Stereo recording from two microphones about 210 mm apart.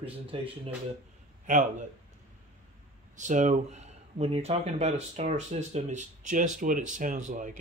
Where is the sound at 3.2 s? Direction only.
35° right (ahead or behind).